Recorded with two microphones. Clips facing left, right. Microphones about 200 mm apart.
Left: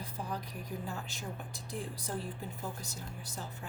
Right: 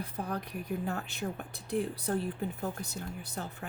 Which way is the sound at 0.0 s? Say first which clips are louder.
Right 4 dB; 60° right (ahead or behind).